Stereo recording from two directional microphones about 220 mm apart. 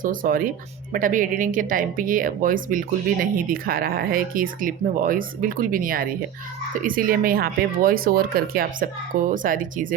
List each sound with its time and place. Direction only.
0.0 s speech: 40° right (ahead or behind)